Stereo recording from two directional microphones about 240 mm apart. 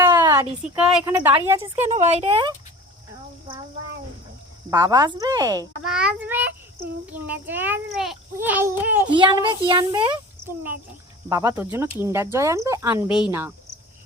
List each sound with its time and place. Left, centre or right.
0.0 s a sound: centre
0.8 s a child's voice: centre
1.8 s a child's voice: right
4.7 s a child's voice: centre
5.8 s a child's voice: centre
9.0 s a child's voice: centre